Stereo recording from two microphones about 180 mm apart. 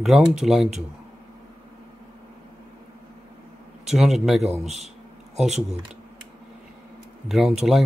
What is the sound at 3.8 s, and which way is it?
Speech, centre (ahead or behind).